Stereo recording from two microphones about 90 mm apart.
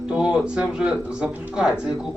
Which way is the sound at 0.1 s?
10° right (ahead or behind).